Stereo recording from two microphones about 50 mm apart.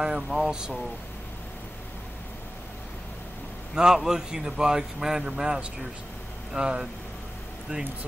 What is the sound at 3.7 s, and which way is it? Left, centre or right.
A man's voice, centre.